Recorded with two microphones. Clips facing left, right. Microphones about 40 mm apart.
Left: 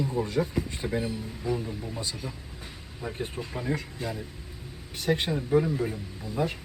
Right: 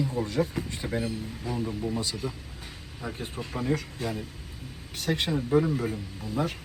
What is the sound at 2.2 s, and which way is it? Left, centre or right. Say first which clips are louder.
Speech: right 4 dB; right.